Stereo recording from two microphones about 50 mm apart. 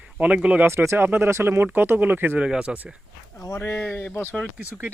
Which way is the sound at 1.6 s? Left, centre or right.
Right.